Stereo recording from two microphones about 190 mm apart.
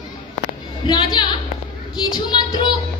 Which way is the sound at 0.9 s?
25° left (ahead or behind).